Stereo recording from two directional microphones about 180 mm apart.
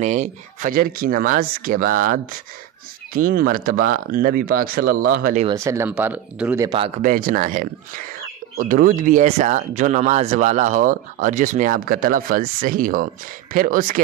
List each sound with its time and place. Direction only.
0.0 s speech: 40° right (ahead or behind)
5.5 s speech: 15° right (ahead or behind)
7.0 s speech: 50° right (ahead or behind)